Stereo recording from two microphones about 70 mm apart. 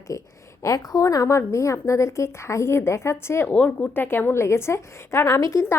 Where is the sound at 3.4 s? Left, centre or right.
Centre.